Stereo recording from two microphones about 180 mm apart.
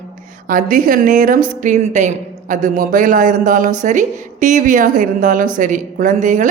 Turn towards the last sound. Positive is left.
turn(degrees=-45)  # may be behind; listen again after turning